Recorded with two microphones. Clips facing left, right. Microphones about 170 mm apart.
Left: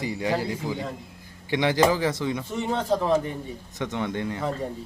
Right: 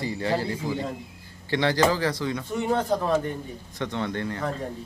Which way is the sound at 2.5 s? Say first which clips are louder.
Right 2 dB; centre (ahead or behind).